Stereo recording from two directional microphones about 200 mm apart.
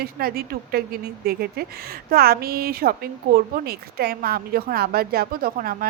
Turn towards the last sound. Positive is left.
turn(degrees=-45)  # may be behind; listen again after turning